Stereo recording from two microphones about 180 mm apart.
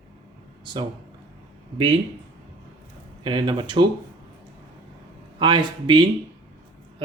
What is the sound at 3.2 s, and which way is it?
Speech, 25° right (ahead or behind).